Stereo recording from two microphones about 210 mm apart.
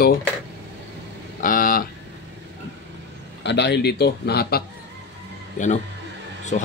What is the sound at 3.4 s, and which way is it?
Speech, 55° left (ahead or behind).